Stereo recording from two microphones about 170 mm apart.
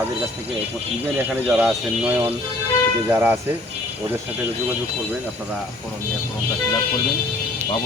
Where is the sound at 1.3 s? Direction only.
5° right (ahead or behind).